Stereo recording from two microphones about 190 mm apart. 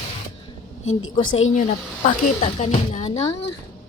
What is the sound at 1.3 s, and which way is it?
Speech, 90° left.